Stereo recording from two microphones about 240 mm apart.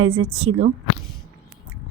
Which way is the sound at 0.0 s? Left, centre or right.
Right.